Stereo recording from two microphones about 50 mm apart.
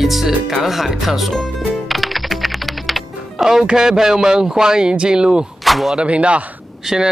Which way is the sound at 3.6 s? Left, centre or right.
Centre.